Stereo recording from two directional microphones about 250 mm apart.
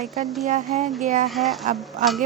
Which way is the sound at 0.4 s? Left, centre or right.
Right.